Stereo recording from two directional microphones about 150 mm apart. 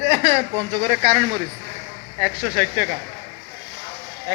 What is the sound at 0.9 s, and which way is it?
Speech, 90° right.